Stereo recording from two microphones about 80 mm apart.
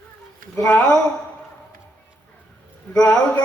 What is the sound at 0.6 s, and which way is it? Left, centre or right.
Speech, centre.